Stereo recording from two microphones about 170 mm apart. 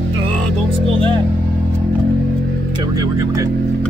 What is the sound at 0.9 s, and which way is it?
Music, 30° right (ahead or behind).